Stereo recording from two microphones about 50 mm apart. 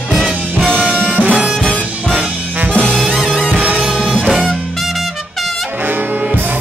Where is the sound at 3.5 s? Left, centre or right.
Right.